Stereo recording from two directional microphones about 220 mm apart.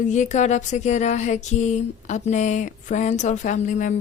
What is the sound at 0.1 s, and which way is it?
A woman's voice, 35° left (ahead or behind).